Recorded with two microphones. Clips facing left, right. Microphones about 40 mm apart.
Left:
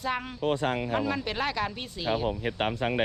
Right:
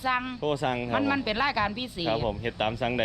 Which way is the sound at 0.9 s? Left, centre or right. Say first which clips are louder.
Right 3 dB; centre.